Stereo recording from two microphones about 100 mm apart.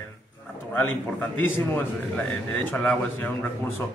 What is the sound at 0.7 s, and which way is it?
Speech, 20° left (ahead or behind).